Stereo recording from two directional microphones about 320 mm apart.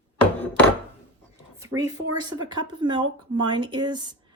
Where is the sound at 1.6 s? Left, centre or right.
Centre.